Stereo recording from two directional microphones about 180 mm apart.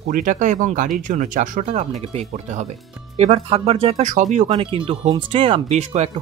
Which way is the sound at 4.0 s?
45° right (ahead or behind).